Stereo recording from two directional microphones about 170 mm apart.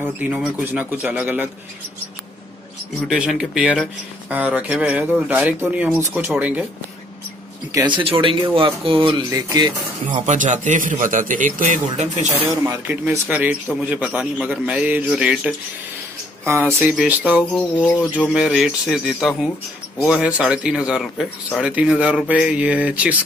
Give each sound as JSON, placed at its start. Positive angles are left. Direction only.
{"t": 0.0, "sound": "speech", "side_deg": -10}
{"t": 3.1, "sound": "speech", "side_deg": -5}
{"t": 7.7, "sound": "speech", "side_deg": -25}
{"t": 10.2, "sound": "a man's voice", "side_deg": -45}
{"t": 12.4, "sound": "speech", "side_deg": -15}
{"t": 16.8, "sound": "speech", "side_deg": 0}